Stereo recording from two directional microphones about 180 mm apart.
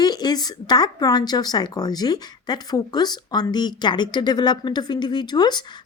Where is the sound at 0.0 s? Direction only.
20° left (ahead or behind).